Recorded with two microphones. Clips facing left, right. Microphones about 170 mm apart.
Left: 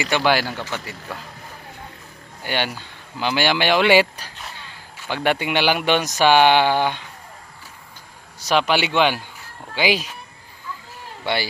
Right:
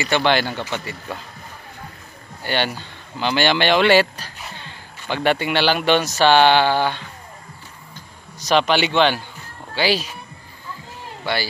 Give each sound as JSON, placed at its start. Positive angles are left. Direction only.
{"t": 0.1, "sound": "speech", "side_deg": 5}
{"t": 2.4, "sound": "speech", "side_deg": 10}
{"t": 8.4, "sound": "speech", "side_deg": 10}
{"t": 11.3, "sound": "a man's voice", "side_deg": 25}